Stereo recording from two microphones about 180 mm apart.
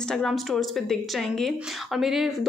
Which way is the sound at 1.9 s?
Centre (ahead or behind).